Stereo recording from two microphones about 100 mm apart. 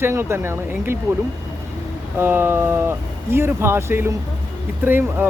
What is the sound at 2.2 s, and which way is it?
Speech, 20° right (ahead or behind).